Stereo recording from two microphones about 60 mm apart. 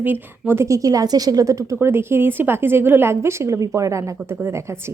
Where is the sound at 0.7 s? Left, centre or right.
Right.